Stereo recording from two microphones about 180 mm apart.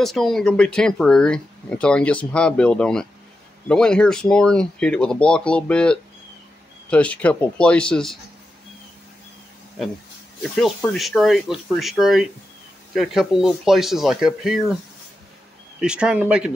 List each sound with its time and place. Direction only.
0.0 s speech: centre (ahead or behind)
10.5 s speech: 5° left (ahead or behind)
15.8 s speech: 5° right (ahead or behind)